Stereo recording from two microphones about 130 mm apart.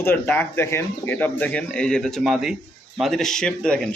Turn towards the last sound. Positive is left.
turn(degrees=5)  # may be behind; listen again after turning